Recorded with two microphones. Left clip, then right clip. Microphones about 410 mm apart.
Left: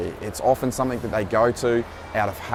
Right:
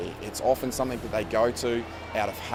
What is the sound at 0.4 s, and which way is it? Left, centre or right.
Speech, left.